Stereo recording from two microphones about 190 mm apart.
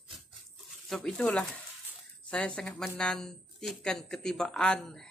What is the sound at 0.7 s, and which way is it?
Speech, centre (ahead or behind).